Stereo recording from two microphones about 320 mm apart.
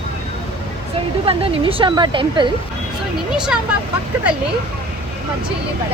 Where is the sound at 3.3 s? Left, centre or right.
Centre.